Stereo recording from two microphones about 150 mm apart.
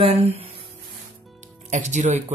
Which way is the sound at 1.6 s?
55° right (ahead or behind).